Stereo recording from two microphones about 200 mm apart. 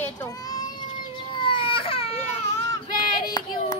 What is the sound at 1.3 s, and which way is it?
Baby cry, 25° left (ahead or behind).